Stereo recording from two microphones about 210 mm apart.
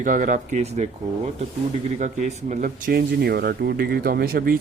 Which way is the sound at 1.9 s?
35° right (ahead or behind).